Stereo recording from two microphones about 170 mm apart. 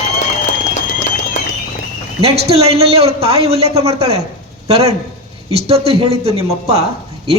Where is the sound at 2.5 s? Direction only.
35° right (ahead or behind).